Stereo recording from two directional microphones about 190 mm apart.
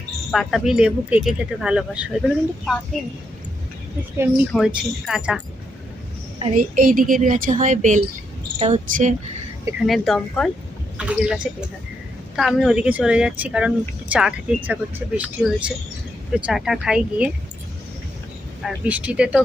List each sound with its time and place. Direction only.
0.3 s speech: centre (ahead or behind)
4.5 s speech: 5° right (ahead or behind)
6.5 s a woman's voice: 45° right (ahead or behind)
9.6 s speech: 5° right (ahead or behind)
12.4 s speech: centre (ahead or behind)
18.6 s speech: 5° right (ahead or behind)